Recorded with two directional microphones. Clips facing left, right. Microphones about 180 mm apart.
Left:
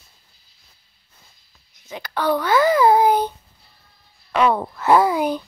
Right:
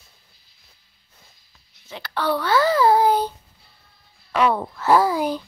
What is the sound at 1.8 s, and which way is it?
A child's voice, 15° left (ahead or behind).